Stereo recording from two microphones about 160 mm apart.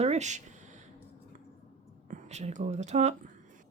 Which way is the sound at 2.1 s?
45° right (ahead or behind).